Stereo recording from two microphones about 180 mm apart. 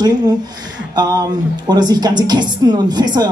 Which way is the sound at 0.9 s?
20° right (ahead or behind).